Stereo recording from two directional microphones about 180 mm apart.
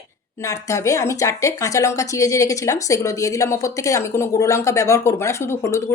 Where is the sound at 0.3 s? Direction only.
20° left (ahead or behind).